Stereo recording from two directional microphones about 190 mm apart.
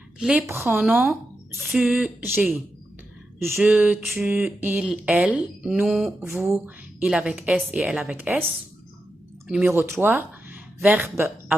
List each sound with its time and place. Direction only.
0.2 s a woman's voice: 5° right (ahead or behind)
6.2 s a woman's voice: 15° right (ahead or behind)
9.5 s speech: 10° right (ahead or behind)